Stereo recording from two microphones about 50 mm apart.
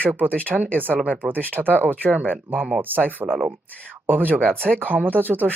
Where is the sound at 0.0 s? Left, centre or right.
Right.